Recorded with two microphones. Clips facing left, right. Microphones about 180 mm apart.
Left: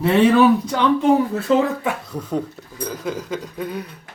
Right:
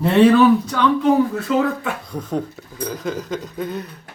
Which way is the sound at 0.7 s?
30° left (ahead or behind).